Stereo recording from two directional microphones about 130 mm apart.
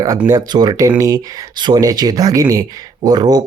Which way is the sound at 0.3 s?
30° right (ahead or behind).